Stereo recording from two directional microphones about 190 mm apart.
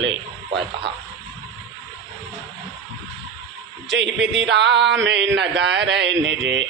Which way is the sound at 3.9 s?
65° right (ahead or behind).